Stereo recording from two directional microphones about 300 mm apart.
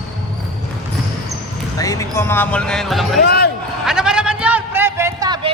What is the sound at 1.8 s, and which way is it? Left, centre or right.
Music, centre.